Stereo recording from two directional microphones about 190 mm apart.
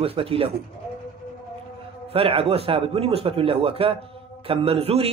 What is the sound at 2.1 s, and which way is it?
A man's voice, 30° right (ahead or behind).